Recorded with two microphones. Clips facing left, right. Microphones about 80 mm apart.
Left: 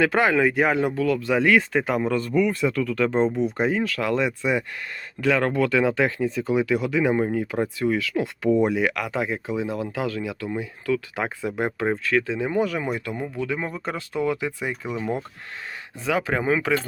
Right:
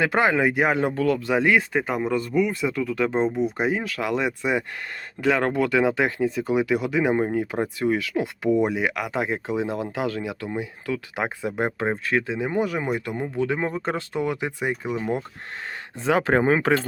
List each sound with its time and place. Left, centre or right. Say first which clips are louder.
0.0 s speech: left 1 dB; right
0.9 s a man's voice: even; right
1.3 s speech: left 3 dB; centre
16.1 s speech: right 3 dB; right